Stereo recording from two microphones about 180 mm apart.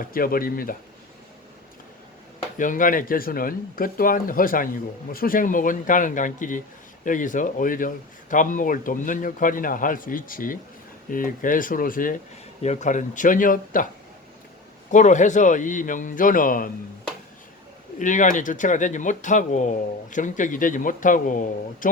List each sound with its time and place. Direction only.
0.0 s speech: 55° left (ahead or behind)
2.6 s speech: 45° left (ahead or behind)
14.8 s speech: 45° left (ahead or behind)
18.0 s speech: 45° left (ahead or behind)